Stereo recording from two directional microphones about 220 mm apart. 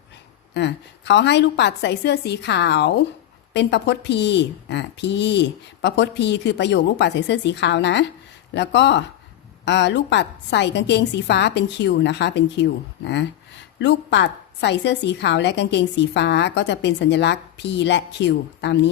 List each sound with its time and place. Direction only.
0.5 s a woman's voice: 50° left (ahead or behind)